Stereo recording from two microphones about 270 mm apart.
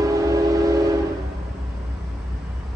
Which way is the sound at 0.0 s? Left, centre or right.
Centre.